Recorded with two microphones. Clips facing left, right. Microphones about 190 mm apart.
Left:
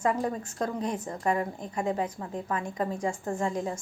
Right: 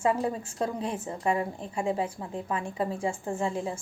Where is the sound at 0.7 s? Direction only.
30° right (ahead or behind).